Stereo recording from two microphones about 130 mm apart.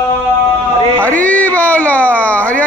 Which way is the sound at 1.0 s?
10° left (ahead or behind).